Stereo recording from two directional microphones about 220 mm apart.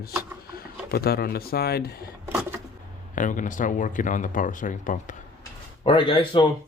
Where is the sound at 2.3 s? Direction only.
10° right (ahead or behind).